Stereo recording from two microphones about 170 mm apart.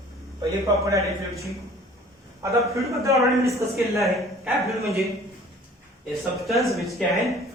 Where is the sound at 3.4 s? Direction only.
15° right (ahead or behind).